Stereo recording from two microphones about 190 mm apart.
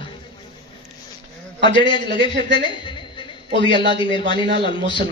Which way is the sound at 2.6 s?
25° left (ahead or behind).